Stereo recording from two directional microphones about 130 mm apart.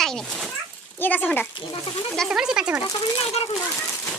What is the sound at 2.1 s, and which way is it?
Speech, centre (ahead or behind).